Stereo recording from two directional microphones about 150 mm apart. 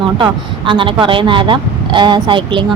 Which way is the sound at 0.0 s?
35° right (ahead or behind).